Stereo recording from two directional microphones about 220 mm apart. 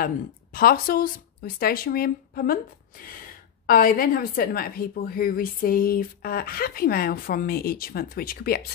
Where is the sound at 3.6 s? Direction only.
40° left (ahead or behind).